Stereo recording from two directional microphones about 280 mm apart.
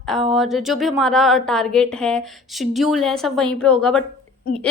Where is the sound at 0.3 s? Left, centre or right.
Centre.